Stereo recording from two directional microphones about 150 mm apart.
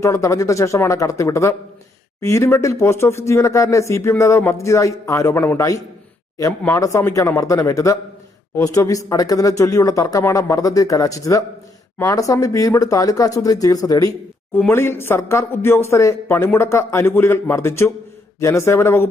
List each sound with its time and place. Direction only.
0.0 s speech: 20° left (ahead or behind)